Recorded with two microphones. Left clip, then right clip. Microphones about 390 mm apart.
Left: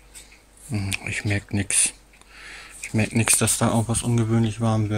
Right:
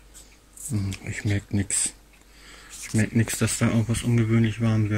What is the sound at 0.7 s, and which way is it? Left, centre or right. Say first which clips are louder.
Speech: left 6 dB; centre.